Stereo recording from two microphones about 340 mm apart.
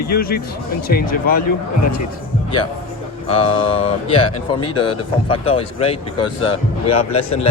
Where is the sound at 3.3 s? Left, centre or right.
Centre.